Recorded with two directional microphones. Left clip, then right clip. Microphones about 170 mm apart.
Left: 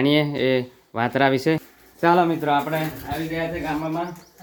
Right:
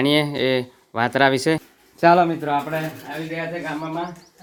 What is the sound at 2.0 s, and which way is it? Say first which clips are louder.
Speech: right 4 dB; 65° right (ahead or behind).